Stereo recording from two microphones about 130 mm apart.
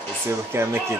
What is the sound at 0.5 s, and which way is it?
Speech, 20° right (ahead or behind).